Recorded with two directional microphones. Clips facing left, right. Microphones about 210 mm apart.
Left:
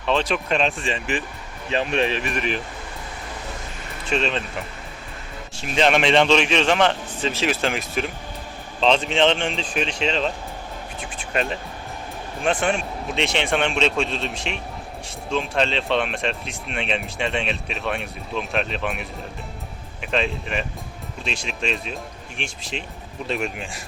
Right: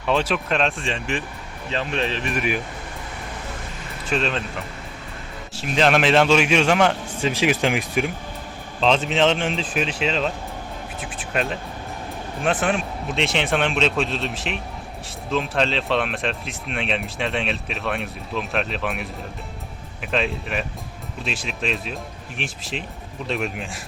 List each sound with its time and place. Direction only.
0.0 s speech: 10° right (ahead or behind)
1.7 s speech: 15° left (ahead or behind)
2.2 s speech: 5° right (ahead or behind)
4.1 s speech: centre (ahead or behind)
5.5 s a man's voice: centre (ahead or behind)
8.8 s speech: centre (ahead or behind)